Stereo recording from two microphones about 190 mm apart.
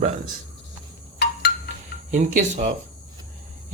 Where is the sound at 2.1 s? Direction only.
40° right (ahead or behind).